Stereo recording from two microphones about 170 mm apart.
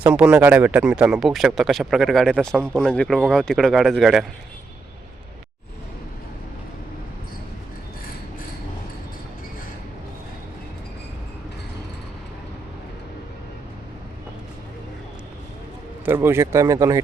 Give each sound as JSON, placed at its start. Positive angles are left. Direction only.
{"t": 0.0, "sound": "speech", "side_deg": -10}
{"t": 16.0, "sound": "speech", "side_deg": -10}